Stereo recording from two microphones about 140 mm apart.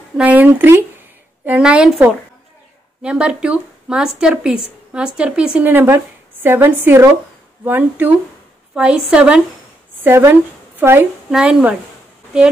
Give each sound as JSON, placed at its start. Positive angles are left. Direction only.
{"t": 0.2, "sound": "a woman's voice", "side_deg": -10}
{"t": 11.2, "sound": "speech", "side_deg": -5}